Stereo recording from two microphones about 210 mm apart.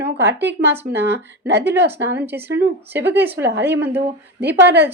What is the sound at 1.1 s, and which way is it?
Speech, 55° right (ahead or behind).